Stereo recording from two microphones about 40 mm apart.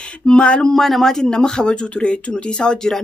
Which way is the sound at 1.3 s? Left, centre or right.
Centre.